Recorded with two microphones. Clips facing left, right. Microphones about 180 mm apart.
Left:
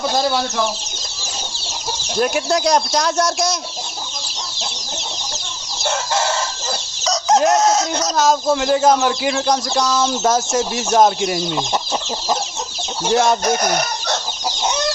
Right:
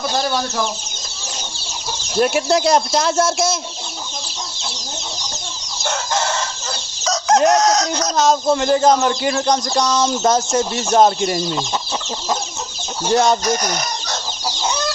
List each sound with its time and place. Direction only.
0.1 s speech: 10° left (ahead or behind)
2.1 s chicken: centre (ahead or behind)
7.0 s chicken: centre (ahead or behind)
13.1 s chicken: centre (ahead or behind)
13.4 s chicken: 55° left (ahead or behind)
14.4 s chicken: 20° left (ahead or behind)